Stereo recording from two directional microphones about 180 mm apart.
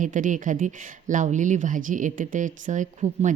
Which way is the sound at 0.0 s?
45° right (ahead or behind).